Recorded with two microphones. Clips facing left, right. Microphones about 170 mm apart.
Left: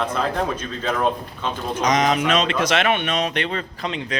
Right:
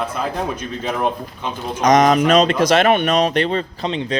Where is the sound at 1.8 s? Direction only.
45° right (ahead or behind).